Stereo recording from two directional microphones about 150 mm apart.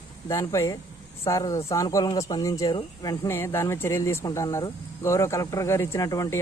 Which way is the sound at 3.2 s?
15° left (ahead or behind).